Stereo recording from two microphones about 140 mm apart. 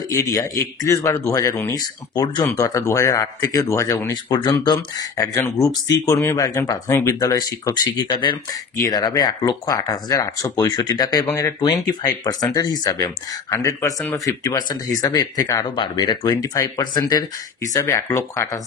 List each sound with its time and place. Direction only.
0.1 s speech: 25° left (ahead or behind)